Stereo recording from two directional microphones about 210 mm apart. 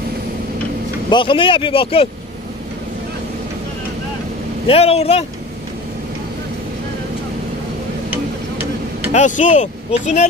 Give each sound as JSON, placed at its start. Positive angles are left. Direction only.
{"t": 1.1, "sound": "speech", "side_deg": 25}
{"t": 4.6, "sound": "speech", "side_deg": 30}
{"t": 8.1, "sound": "a sound", "side_deg": -10}
{"t": 9.1, "sound": "speech", "side_deg": 35}